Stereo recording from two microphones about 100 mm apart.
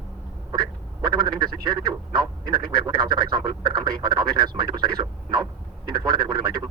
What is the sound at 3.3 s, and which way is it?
Radio, 45° right (ahead or behind).